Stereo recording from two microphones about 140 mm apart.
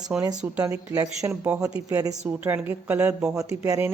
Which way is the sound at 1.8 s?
25° right (ahead or behind).